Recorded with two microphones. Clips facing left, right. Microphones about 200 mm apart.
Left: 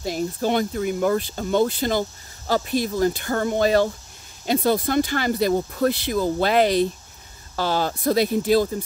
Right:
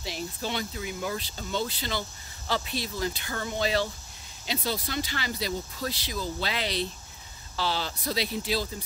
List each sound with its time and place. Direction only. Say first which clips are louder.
0.0 s speech: left 10 dB; 45° left (ahead or behind)